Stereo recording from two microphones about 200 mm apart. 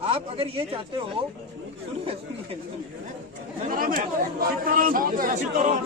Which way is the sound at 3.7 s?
45° right (ahead or behind).